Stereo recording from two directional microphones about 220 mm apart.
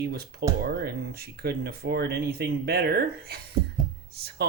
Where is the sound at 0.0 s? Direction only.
45° right (ahead or behind).